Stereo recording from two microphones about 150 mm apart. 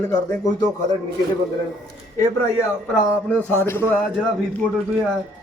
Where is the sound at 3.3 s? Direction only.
15° left (ahead or behind).